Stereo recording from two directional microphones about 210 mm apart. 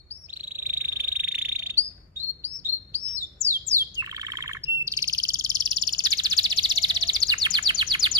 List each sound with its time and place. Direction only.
0.7 s insect: 10° right (ahead or behind)
2.4 s chirp: 10° right (ahead or behind)
3.4 s bird: 15° right (ahead or behind)
4.8 s frog: 15° right (ahead or behind)